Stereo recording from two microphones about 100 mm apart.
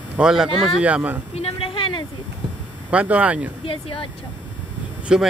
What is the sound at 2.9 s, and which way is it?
Speech, 15° right (ahead or behind).